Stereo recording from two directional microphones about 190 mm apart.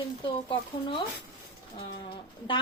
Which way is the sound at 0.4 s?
25° left (ahead or behind).